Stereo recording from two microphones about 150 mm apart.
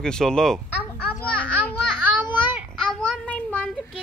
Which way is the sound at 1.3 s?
10° left (ahead or behind).